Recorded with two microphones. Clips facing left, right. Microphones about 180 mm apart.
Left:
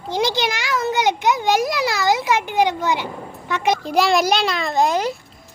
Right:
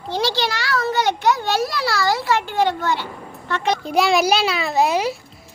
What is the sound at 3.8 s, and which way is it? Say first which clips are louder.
A child's voice: right 1 dB; centre (ahead or behind).